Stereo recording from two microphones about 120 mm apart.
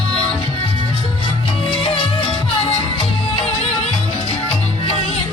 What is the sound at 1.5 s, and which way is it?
Music, 50° left (ahead or behind).